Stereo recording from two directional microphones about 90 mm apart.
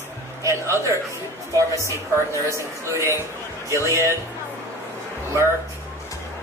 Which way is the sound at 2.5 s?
30° right (ahead or behind).